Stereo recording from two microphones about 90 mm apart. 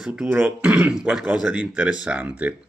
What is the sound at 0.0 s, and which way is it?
Speech, 10° right (ahead or behind).